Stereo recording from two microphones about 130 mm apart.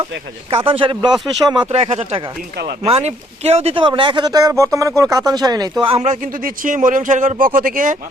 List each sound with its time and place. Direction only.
0.5 s speech: 45° right (ahead or behind)
1.7 s speech: 55° right (ahead or behind); by 5.8 s 30° right (ahead or behind)
6.0 s speech: 80° right